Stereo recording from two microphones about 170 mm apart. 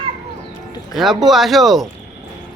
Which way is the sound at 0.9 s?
Centre (ahead or behind).